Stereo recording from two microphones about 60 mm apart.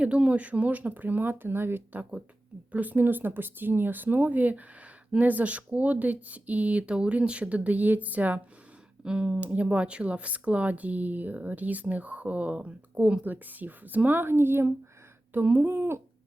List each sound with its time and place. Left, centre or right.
0.0 s speech: right
9.0 s speech: centre; by 14.7 s right
15.3 s speech: right